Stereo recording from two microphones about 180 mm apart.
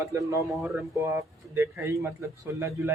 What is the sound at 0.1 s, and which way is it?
Speech, 15° right (ahead or behind).